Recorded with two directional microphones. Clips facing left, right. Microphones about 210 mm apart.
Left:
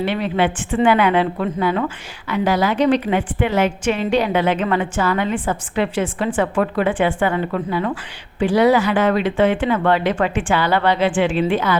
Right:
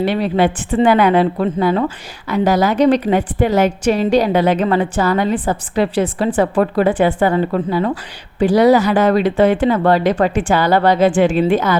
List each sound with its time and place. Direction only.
0.0 s a woman's voice: 40° right (ahead or behind)